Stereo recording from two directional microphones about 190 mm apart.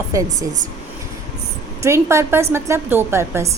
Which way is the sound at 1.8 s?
15° right (ahead or behind).